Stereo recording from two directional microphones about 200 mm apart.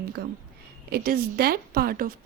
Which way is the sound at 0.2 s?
50° right (ahead or behind).